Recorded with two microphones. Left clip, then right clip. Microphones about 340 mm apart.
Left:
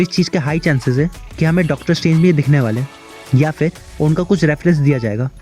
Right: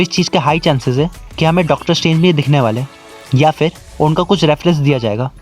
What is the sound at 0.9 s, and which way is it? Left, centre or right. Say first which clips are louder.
Speech: right 3 dB; right.